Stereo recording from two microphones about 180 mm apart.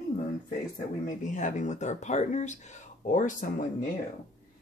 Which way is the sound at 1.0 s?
45° left (ahead or behind).